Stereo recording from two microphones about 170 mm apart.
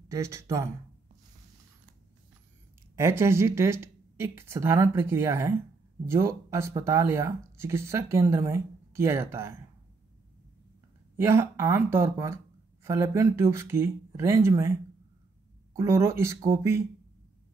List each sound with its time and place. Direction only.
0.1 s speech: 15° right (ahead or behind)
3.0 s speech: 15° right (ahead or behind)
11.1 s speech: 15° right (ahead or behind)
15.7 s speech: 15° right (ahead or behind)